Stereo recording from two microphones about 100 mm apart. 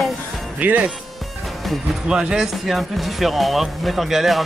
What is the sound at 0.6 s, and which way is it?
Speech, 15° right (ahead or behind).